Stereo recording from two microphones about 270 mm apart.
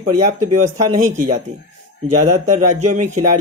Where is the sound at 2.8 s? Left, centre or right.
Right.